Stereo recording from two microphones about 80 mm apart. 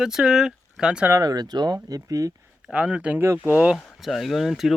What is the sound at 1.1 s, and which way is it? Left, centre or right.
Speech, right.